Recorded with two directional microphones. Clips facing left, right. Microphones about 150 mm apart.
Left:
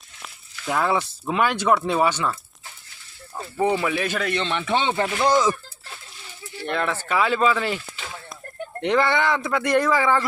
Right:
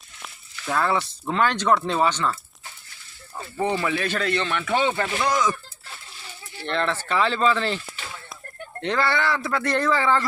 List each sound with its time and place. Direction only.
0.2 s a sound: 10° left (ahead or behind)
1.3 s speech: 10° left (ahead or behind)
3.3 s speech: 10° left (ahead or behind); by 5.5 s 30° left (ahead or behind)
6.7 s speech: 10° left (ahead or behind)
8.8 s speech: 15° left (ahead or behind)